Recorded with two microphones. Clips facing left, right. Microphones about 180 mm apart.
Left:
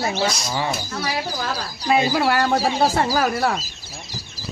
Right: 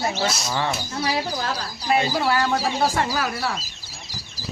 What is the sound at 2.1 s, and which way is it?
Speech, 60° left (ahead or behind).